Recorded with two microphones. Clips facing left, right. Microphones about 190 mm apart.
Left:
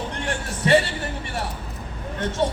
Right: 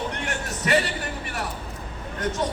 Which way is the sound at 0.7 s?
30° left (ahead or behind).